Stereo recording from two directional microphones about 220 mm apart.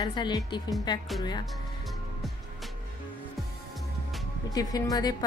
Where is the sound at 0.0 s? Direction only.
20° left (ahead or behind).